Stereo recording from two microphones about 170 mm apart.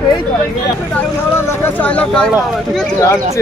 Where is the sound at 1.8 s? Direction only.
5° left (ahead or behind).